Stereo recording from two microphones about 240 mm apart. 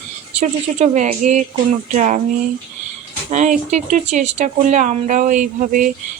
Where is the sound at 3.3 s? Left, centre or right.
Right.